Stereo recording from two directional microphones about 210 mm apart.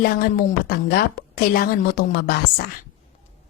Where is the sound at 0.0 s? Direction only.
45° left (ahead or behind).